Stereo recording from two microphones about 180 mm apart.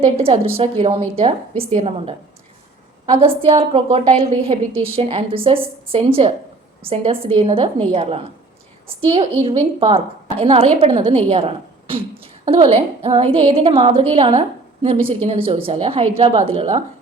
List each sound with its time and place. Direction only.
0.0 s a woman's voice: 30° right (ahead or behind)
9.4 s a woman's voice: 30° right (ahead or behind)